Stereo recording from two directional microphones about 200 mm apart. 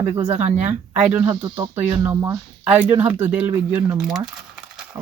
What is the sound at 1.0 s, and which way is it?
Speech, 5° right (ahead or behind).